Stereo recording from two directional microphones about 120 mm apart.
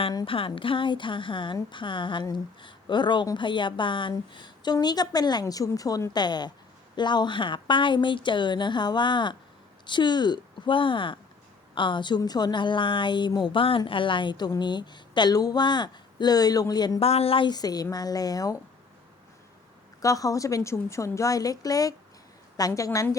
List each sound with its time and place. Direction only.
0.3 s a woman's voice: 45° left (ahead or behind)
17.0 s speech: 55° left (ahead or behind)
17.5 s a woman's voice: 35° left (ahead or behind)
20.0 s a woman's voice: 30° left (ahead or behind)